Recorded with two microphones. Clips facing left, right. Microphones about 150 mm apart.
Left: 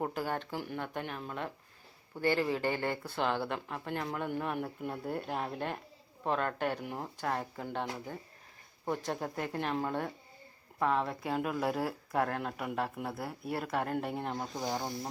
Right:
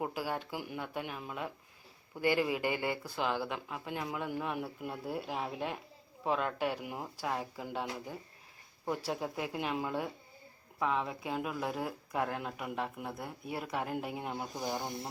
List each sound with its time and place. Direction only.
0.0 s speech: 5° right (ahead or behind)